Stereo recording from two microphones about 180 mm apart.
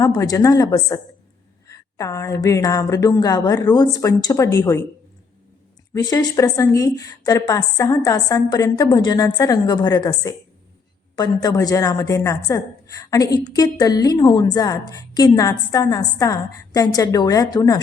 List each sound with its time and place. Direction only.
0.0 s a woman's voice: 20° left (ahead or behind)
5.9 s a woman's voice: 15° left (ahead or behind)